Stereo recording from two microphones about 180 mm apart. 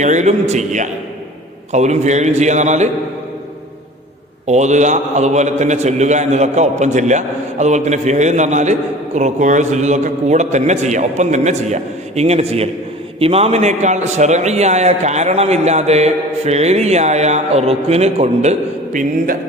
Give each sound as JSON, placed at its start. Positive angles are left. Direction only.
{"t": 0.0, "sound": "a man's voice", "side_deg": -40}
{"t": 4.4, "sound": "a man's voice", "side_deg": -40}
{"t": 18.9, "sound": "speech", "side_deg": -50}